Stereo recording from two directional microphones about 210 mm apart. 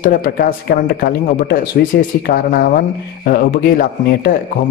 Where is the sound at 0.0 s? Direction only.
40° left (ahead or behind).